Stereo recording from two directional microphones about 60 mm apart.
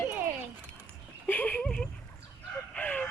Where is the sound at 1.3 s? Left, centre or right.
Left.